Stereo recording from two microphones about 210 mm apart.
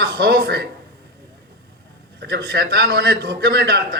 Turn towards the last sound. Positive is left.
turn(degrees=-50)  # may be behind; listen again after turning